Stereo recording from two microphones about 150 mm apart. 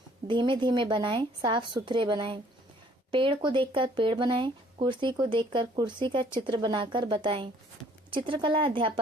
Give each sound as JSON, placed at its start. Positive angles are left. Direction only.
{"t": 0.3, "sound": "speech", "side_deg": -35}